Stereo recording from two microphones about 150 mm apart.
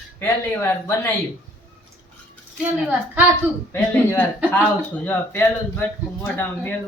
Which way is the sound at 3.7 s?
15° left (ahead or behind).